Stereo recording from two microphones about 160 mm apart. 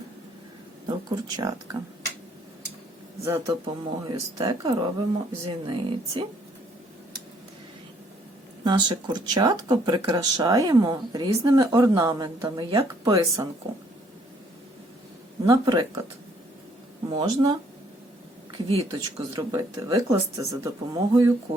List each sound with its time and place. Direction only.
0.9 s speech: 25° right (ahead or behind)
3.2 s speech: 20° right (ahead or behind)
8.6 s speech: 30° right (ahead or behind)
15.4 s speech: 25° right (ahead or behind)
17.1 s speech: 30° right (ahead or behind)